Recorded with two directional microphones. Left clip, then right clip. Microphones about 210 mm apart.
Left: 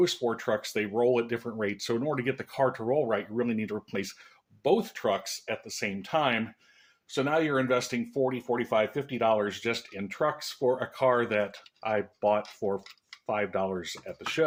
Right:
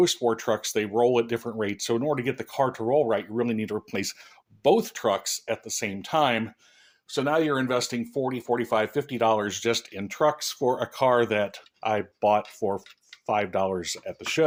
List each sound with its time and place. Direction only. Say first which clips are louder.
0.0 s speech: right 4 dB; 35° right (ahead or behind)